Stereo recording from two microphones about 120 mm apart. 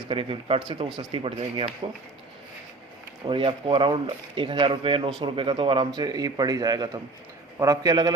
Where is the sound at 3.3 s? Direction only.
50° right (ahead or behind).